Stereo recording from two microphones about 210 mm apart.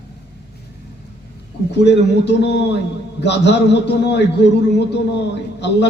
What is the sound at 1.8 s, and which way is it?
A man's voice, 55° left (ahead or behind).